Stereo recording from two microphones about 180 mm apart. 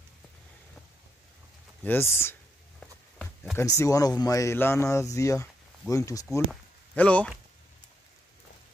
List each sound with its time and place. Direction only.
1.8 s speech: 10° left (ahead or behind)
3.5 s speech: 15° left (ahead or behind)
6.5 s a sound: 5° left (ahead or behind)